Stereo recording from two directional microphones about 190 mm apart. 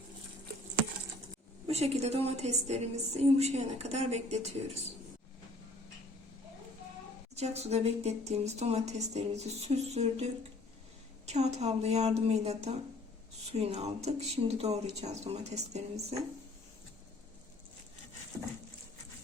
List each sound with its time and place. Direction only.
1.6 s a woman's voice: 35° right (ahead or behind)
7.3 s a woman's voice: 35° right (ahead or behind)
11.3 s a woman's voice: 35° right (ahead or behind)